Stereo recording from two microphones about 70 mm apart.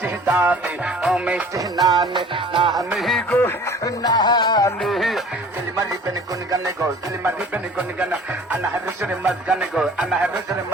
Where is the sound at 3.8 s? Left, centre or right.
Left.